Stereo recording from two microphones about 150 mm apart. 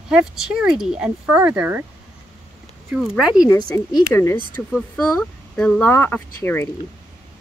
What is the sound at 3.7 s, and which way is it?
Speech, 15° left (ahead or behind).